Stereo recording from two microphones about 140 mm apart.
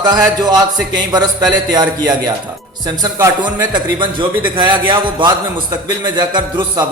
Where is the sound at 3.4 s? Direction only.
35° right (ahead or behind).